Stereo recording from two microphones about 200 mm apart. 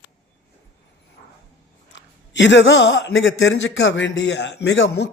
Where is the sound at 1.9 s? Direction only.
65° left (ahead or behind).